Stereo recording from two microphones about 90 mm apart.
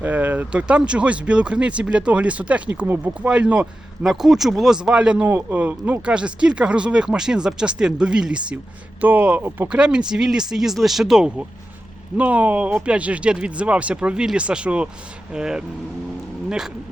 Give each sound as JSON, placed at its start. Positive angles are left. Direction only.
{"t": 0.0, "sound": "speech", "side_deg": -20}
{"t": 4.0, "sound": "speech", "side_deg": -5}